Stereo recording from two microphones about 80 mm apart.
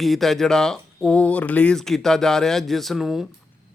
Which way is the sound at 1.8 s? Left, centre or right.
Centre.